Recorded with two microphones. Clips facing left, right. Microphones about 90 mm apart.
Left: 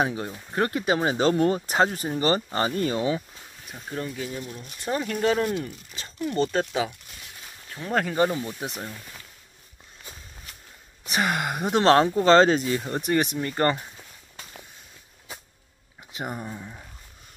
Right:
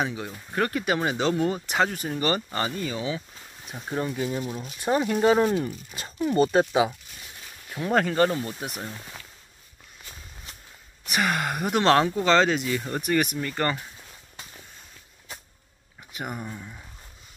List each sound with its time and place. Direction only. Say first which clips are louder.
0.6 s speech: left 1 dB; 25° left (ahead or behind)
1.7 s speech: left 2 dB; 35° left (ahead or behind)
2.7 s speech: left 5 dB; 45° left (ahead or behind)
3.7 s speech: right 3 dB; 15° right (ahead or behind)
7.9 s speech: right 1 dB; centre (ahead or behind)
8.7 s speech: even; 20° right (ahead or behind)
11.1 s speech: even; 25° left (ahead or behind)
16.1 s a sound: left 1 dB; 25° left (ahead or behind)
16.4 s speech: left 1 dB; 20° left (ahead or behind)